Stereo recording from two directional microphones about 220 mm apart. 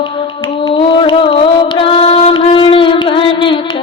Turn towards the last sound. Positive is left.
turn(degrees=25)  # may be behind; listen again after turning